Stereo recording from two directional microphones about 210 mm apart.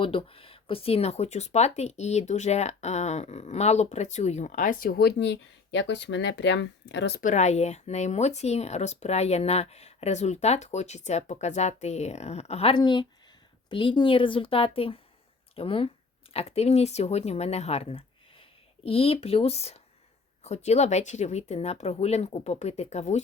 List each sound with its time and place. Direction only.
0.0 s speech: 25° left (ahead or behind); by 7.2 s 55° left (ahead or behind)
7.2 s a woman's voice: 35° left (ahead or behind)